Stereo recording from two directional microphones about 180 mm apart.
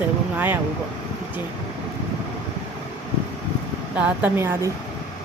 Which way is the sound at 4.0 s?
10° right (ahead or behind).